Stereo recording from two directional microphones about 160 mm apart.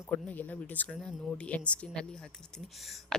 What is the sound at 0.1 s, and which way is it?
A woman's voice, 10° left (ahead or behind).